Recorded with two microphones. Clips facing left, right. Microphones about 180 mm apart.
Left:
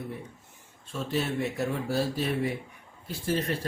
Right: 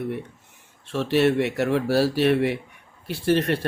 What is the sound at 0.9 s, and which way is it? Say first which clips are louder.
Speech: right 10 dB; 75° right (ahead or behind).